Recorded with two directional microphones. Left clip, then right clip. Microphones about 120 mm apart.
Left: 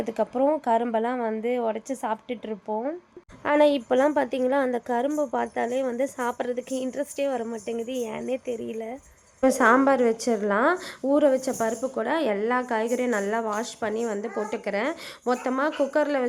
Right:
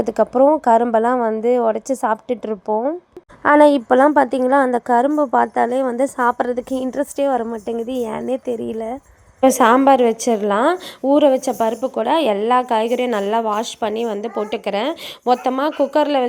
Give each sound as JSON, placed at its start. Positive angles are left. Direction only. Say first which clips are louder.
{"t": 0.0, "sound": "a woman's voice", "louder": "right 10 dB", "side_deg": -55}